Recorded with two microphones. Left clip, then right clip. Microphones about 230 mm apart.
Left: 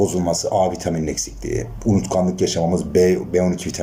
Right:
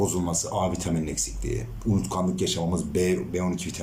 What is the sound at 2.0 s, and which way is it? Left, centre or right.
Speech, right.